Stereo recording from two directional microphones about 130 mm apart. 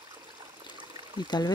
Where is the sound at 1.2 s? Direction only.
35° left (ahead or behind).